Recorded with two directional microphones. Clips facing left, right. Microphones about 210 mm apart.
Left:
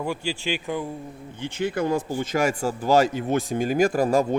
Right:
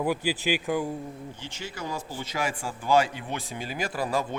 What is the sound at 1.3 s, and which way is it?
Speech, 55° left (ahead or behind).